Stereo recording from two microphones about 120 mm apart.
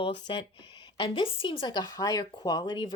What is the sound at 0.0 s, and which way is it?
Speech, 45° left (ahead or behind).